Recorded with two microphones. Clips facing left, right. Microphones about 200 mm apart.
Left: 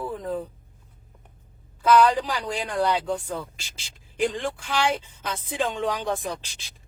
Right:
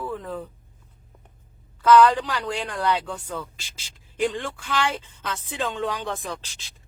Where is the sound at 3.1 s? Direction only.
35° left (ahead or behind).